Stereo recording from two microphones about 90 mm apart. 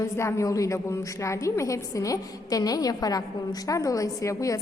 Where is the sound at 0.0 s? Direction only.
30° left (ahead or behind).